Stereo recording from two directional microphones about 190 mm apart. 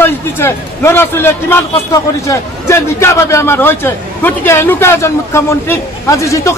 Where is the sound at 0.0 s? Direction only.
15° left (ahead or behind).